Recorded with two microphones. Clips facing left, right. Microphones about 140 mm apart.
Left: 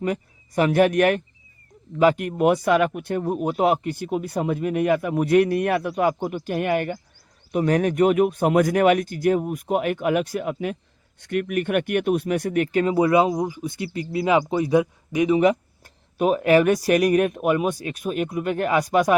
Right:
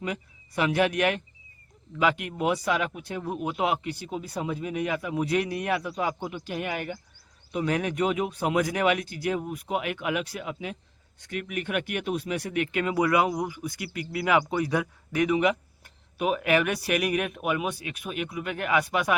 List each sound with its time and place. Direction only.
0.0 s speech: 45° left (ahead or behind); by 15.4 s 20° left (ahead or behind)
15.4 s speech: 40° left (ahead or behind)